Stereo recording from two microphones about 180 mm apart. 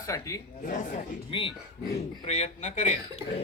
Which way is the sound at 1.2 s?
30° left (ahead or behind).